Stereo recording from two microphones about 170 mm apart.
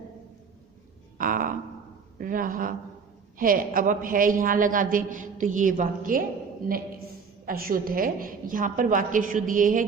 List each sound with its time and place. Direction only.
1.2 s a sound: 55° right (ahead or behind)
2.1 s a woman's voice: 55° right (ahead or behind)
7.4 s a man's voice: 60° right (ahead or behind)